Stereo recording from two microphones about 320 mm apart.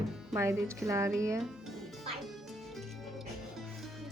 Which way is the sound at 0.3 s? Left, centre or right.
Centre.